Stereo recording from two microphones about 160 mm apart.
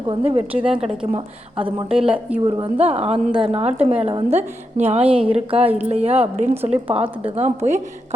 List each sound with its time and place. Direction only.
0.1 s a woman's voice: 35° right (ahead or behind)
0.5 s a woman's voice: 5° right (ahead or behind)
1.1 s a woman's voice: 35° right (ahead or behind)
1.9 s speech: 5° right (ahead or behind)
2.4 s a woman's voice: 40° right (ahead or behind)
5.0 s a woman's voice: 10° right (ahead or behind)
5.5 s a woman's voice: 35° right (ahead or behind)